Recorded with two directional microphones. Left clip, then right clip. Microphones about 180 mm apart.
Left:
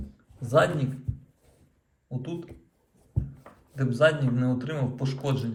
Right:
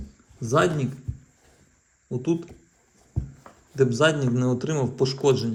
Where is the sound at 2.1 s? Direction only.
35° right (ahead or behind).